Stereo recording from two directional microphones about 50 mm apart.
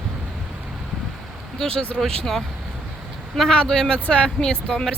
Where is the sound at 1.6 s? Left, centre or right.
Centre.